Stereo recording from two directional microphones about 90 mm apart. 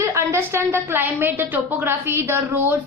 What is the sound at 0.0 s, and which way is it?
A woman's voice, 30° right (ahead or behind).